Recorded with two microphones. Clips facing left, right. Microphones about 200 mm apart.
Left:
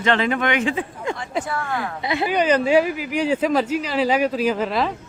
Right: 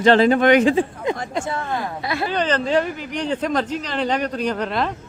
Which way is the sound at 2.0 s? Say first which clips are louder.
Left 4 dB; 20° left (ahead or behind).